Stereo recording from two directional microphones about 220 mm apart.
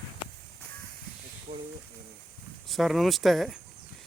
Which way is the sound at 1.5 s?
35° right (ahead or behind).